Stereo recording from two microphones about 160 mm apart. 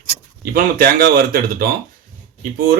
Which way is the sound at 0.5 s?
65° right (ahead or behind).